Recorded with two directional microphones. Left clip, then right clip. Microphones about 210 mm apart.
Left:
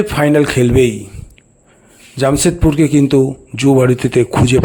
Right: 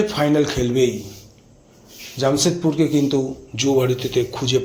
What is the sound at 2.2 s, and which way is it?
A man's voice, 45° left (ahead or behind).